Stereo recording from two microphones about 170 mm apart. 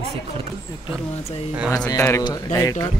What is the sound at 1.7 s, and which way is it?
Speech, 20° left (ahead or behind).